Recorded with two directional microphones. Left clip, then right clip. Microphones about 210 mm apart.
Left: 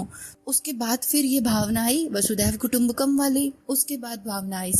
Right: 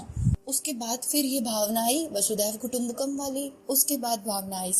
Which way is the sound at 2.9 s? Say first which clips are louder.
Left 7 dB; 90° left.